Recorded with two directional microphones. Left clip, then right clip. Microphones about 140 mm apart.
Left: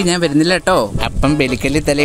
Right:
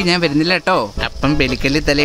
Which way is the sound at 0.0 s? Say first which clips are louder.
Left 1 dB; 20° left (ahead or behind).